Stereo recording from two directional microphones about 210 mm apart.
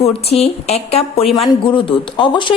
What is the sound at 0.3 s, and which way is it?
Speech, 30° left (ahead or behind).